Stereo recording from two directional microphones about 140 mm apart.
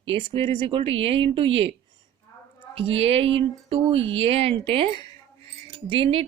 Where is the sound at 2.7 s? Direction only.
45° right (ahead or behind).